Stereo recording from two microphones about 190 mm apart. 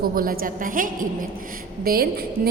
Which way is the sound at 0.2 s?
50° right (ahead or behind).